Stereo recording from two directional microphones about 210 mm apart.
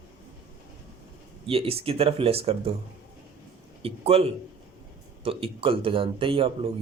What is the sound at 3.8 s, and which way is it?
A man's voice, 30° right (ahead or behind).